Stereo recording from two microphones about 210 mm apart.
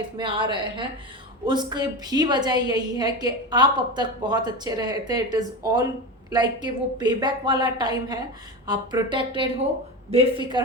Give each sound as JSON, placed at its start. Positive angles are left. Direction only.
{"t": 0.2, "sound": "a woman's voice", "side_deg": -20}